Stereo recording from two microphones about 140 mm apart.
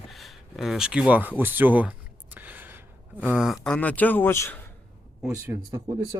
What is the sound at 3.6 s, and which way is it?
Speech, 10° left (ahead or behind).